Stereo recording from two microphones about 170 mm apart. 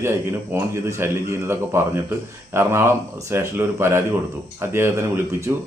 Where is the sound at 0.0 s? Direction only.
15° right (ahead or behind).